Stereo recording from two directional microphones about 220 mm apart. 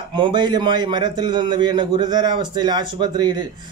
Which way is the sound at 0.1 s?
20° right (ahead or behind).